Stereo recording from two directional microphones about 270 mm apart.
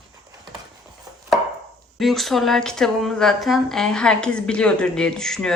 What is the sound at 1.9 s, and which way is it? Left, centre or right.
Speech, centre.